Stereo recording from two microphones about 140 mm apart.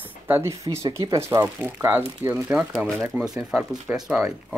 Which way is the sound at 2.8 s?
Centre (ahead or behind).